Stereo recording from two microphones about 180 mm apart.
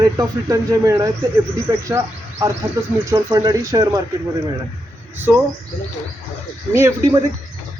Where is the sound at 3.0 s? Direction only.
15° right (ahead or behind).